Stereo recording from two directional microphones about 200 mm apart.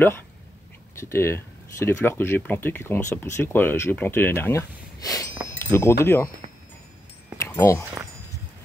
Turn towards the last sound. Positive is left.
turn(degrees=15)  # may be behind; listen again after turning